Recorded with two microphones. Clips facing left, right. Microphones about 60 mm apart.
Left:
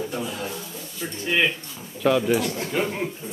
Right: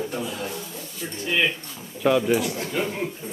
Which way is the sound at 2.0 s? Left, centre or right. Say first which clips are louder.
Even; centre.